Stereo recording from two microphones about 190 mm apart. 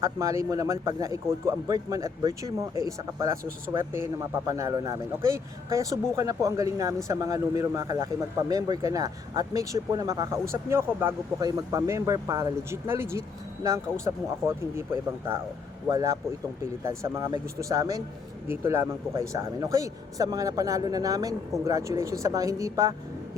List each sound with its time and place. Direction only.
0.0 s speech: 15° right (ahead or behind)
15.9 s speech: 20° right (ahead or behind)